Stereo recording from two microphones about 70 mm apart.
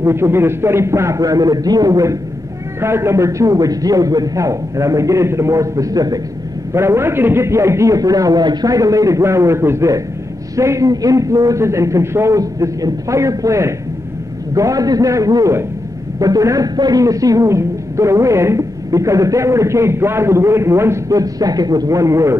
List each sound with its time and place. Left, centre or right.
0.0 s a man's voice: right
1.2 s a man's voice: right
2.8 s a man's voice: right
6.7 s a man's voice: right
8.7 s a man's voice: right
9.2 s a man's voice: right
12.4 s a man's voice: right
21.2 s a man's voice: right